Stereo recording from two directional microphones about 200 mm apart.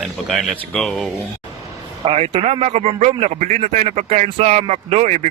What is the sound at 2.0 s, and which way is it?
Speech, 30° right (ahead or behind).